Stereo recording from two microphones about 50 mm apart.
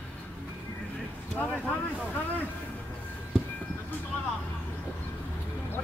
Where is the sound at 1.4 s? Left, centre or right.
Left.